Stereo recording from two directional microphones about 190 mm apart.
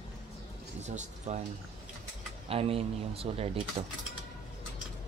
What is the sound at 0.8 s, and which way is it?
Speech, 35° right (ahead or behind).